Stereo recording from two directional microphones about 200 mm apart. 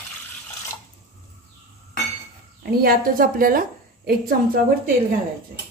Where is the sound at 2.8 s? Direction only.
45° right (ahead or behind).